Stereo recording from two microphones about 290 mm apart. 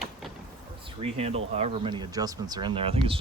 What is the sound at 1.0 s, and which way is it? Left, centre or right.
Speech, right.